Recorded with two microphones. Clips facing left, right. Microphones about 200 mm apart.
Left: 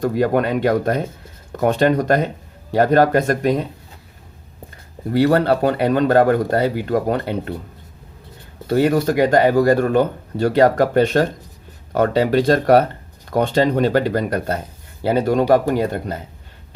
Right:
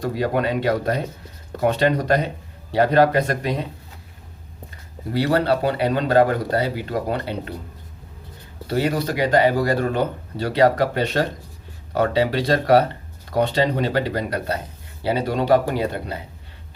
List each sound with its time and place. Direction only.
0.0 s speech: 50° left (ahead or behind)
5.1 s speech: 50° left (ahead or behind)
8.6 s speech: 50° left (ahead or behind)